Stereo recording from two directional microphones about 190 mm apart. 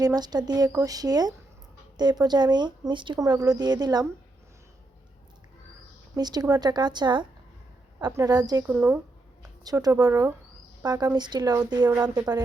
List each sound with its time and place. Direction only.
0.0 s speech: 20° right (ahead or behind)
6.1 s speech: 20° right (ahead or behind)